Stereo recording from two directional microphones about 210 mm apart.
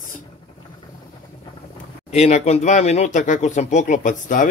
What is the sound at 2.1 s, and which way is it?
Speech, 30° left (ahead or behind).